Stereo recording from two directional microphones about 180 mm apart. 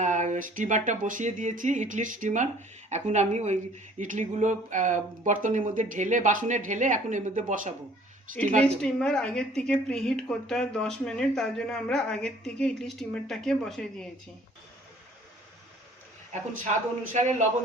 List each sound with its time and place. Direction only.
0.0 s speech: 45° right (ahead or behind)
8.6 s a woman's voice: 5° left (ahead or behind)
17.1 s speech: 45° right (ahead or behind)